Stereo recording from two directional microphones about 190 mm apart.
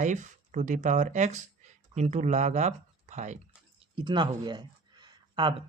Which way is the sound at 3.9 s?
25° right (ahead or behind).